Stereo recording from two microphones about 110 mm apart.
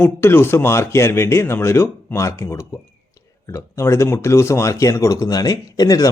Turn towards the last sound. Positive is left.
turn(degrees=35)  # may be behind; listen again after turning